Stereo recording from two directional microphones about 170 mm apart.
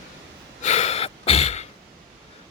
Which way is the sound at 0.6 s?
40° left (ahead or behind).